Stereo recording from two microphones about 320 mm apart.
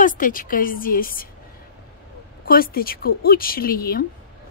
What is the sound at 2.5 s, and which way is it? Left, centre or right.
Speech, left.